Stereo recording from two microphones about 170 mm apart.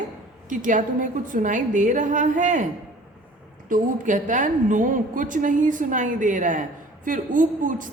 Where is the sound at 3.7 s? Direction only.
50° right (ahead or behind).